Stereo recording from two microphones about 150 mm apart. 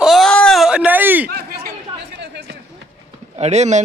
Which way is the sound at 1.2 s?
90° right.